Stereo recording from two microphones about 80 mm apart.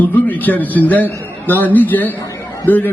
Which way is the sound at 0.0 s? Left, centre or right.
Left.